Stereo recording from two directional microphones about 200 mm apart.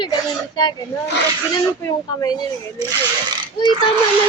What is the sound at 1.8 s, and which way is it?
Speech, 20° left (ahead or behind).